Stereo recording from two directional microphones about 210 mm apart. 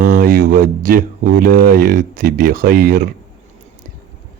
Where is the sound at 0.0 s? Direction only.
45° right (ahead or behind).